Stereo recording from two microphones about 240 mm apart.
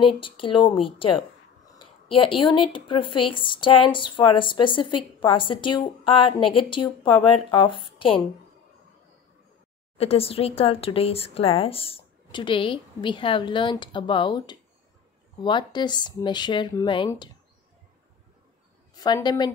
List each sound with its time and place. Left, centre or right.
0.0 s speech: left
2.3 s speech: left
9.9 s speech: left
18.9 s a woman's voice: centre